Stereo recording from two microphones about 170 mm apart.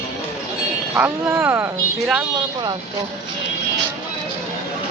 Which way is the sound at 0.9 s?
10° right (ahead or behind).